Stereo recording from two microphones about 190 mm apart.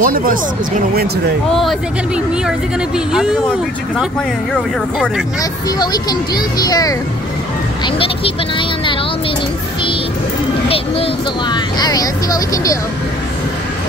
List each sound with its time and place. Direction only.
0.0 s speech: 50° right (ahead or behind)
1.5 s speech: centre (ahead or behind)
4.9 s speech: centre (ahead or behind)
5.4 s speech: 20° left (ahead or behind)
10.7 s speech: 25° left (ahead or behind)